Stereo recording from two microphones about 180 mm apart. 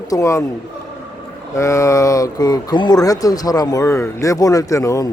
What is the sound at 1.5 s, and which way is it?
Speech, 15° left (ahead or behind).